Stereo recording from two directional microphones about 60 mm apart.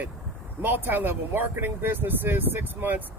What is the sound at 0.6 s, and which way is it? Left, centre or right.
Speech, right.